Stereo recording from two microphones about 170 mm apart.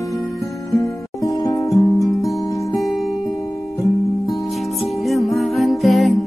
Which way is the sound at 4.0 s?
Centre (ahead or behind).